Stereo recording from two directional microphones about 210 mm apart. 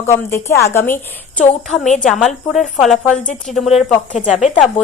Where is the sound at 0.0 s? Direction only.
10° left (ahead or behind).